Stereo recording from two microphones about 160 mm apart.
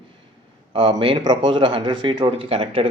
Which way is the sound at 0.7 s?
35° right (ahead or behind).